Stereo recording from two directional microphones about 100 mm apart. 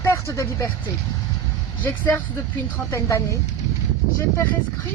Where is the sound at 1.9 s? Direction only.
20° left (ahead or behind).